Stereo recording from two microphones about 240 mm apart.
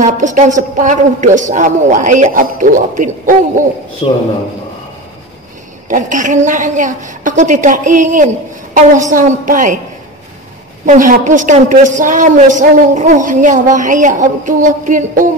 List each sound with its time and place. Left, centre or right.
0.0 s a woman's voice: right
4.0 s a man's voice: left
5.9 s a woman's voice: right
10.9 s a woman's voice: right